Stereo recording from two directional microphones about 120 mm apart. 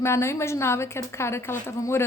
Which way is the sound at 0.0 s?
20° left (ahead or behind).